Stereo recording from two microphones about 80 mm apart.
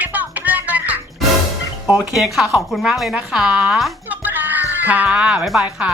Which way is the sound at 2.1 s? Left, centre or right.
Centre.